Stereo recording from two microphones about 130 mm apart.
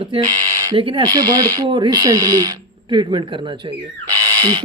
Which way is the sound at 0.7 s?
45° right (ahead or behind).